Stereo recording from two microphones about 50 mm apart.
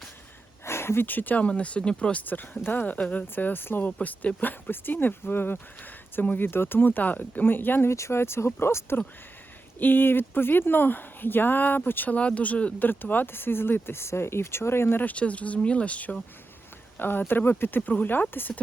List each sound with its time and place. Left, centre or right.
0.6 s a sound: left
1.0 s speech: left
2.2 s speech: left
4.0 s speech: left
7.9 s speech: left
9.7 s speech: left
12.1 s speech: left
12.8 s speech: left
15.0 s speech: left
17.0 s speech: left